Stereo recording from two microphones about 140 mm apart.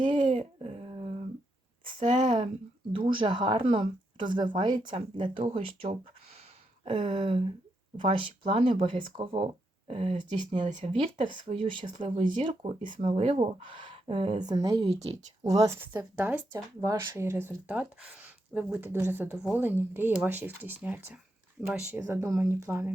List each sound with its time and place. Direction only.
0.3 s dog: 45° right (ahead or behind)
2.1 s a sound: 55° right (ahead or behind)
2.9 s speech: 35° right (ahead or behind)
5.4 s speech: 50° right (ahead or behind)
10.7 s speech: 60° right (ahead or behind)
11.9 s speech: 45° right (ahead or behind)
14.4 s speech: 25° right (ahead or behind)